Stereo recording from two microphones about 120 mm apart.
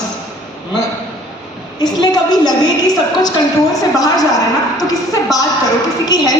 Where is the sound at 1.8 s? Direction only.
35° left (ahead or behind).